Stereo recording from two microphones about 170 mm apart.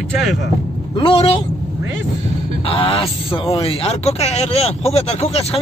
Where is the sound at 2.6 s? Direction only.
35° left (ahead or behind).